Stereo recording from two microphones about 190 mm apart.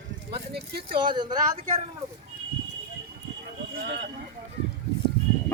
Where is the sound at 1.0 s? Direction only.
25° right (ahead or behind).